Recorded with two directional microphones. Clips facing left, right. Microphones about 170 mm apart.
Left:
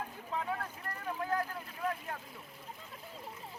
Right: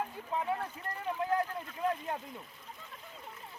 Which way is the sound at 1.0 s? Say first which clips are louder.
Right 3 dB; 20° right (ahead or behind).